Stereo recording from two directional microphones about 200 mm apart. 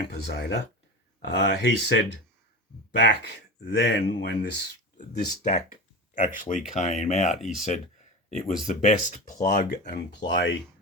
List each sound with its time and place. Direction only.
0.0 s speech: 55° left (ahead or behind)
5.4 s speech: 40° left (ahead or behind)
9.6 s speech: 55° left (ahead or behind)